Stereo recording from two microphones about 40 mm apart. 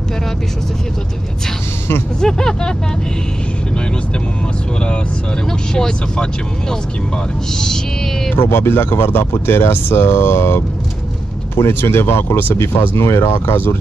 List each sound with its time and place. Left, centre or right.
2.1 s speech: centre
5.8 s speech: centre
7.5 s speech: centre
8.4 s speech: left